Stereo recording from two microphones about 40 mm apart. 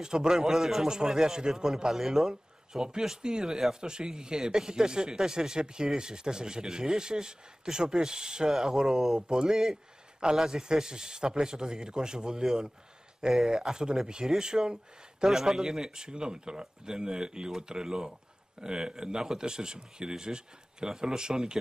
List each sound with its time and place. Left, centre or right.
0.0 s a man's voice: centre